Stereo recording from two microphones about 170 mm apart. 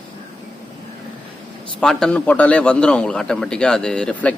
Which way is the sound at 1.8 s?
5° left (ahead or behind).